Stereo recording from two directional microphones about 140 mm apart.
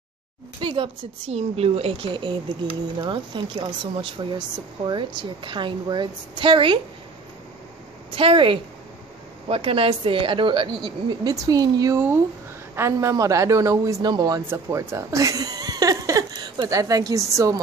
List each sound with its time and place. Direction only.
0.6 s speech: 35° right (ahead or behind)
1.3 s a woman's voice: 45° right (ahead or behind)
8.1 s a man's voice: 40° right (ahead or behind)
14.5 s speech: 20° right (ahead or behind)